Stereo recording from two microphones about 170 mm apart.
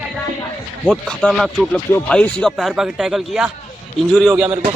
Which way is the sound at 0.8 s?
Centre (ahead or behind).